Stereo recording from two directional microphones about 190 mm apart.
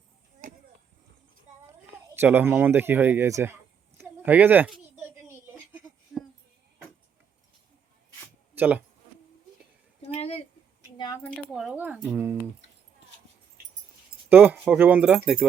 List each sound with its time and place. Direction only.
2.1 s a sound: 10° right (ahead or behind)
8.5 s speech: 10° right (ahead or behind)
10.0 s a sound: 35° left (ahead or behind)
10.9 s keys jangling: 20° left (ahead or behind)
11.5 s speech: 5° right (ahead or behind)
14.3 s speech: 10° right (ahead or behind)